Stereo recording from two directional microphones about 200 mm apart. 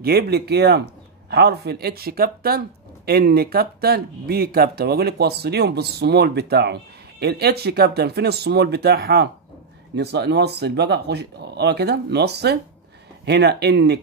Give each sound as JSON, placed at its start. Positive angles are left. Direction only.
{"t": 0.0, "sound": "speech", "side_deg": -50}